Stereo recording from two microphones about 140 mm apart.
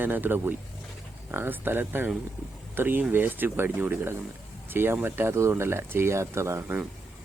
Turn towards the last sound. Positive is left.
turn(degrees=-15)  # may be behind; listen again after turning